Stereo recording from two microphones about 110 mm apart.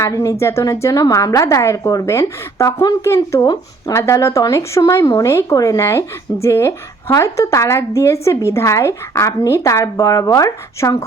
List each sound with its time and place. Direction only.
0.0 s speech: 25° left (ahead or behind)
3.4 s speech: 35° left (ahead or behind)
3.9 s speech: 25° left (ahead or behind)